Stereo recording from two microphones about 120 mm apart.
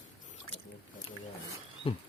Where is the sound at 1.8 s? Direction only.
50° left (ahead or behind).